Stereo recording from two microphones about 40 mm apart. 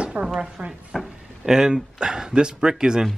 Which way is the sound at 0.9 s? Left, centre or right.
Centre.